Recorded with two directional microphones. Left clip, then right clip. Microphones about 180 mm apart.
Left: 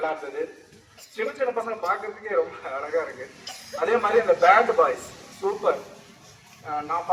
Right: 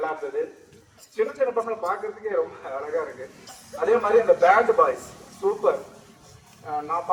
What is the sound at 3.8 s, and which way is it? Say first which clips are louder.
Speech: right 2 dB; 30° right (ahead or behind).